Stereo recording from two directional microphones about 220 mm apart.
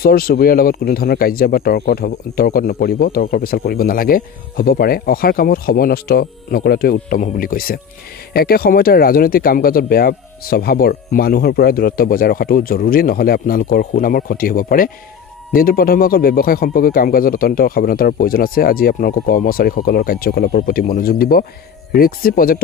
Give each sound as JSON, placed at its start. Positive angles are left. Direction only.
{"t": 0.0, "sound": "speech", "side_deg": 45}